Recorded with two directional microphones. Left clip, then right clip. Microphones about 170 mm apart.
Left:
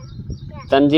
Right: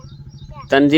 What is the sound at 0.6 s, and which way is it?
Speech, 10° right (ahead or behind).